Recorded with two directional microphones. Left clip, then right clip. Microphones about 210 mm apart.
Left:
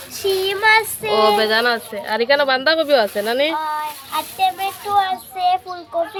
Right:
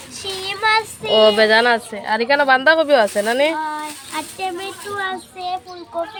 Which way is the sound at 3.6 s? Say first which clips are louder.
Left 2 dB; 45° left (ahead or behind).